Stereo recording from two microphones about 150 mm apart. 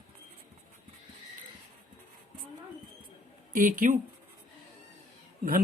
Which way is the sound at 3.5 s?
65° right (ahead or behind).